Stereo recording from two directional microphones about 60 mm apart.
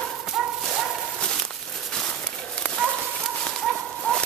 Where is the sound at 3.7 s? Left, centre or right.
Centre.